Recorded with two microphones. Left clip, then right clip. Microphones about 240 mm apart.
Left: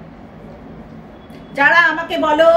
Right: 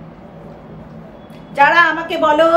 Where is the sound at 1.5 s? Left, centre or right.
Centre.